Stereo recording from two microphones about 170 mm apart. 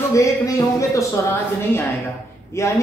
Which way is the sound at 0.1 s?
20° left (ahead or behind).